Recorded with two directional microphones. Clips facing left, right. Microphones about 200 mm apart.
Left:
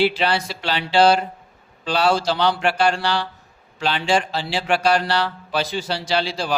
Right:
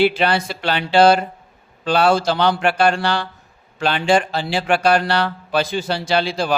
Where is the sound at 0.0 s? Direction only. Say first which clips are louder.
Right 3 dB; 55° right (ahead or behind).